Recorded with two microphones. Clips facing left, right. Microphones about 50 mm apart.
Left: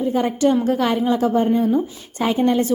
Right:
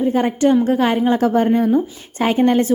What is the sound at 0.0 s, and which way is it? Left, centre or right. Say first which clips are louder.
Speech: right 3 dB; right.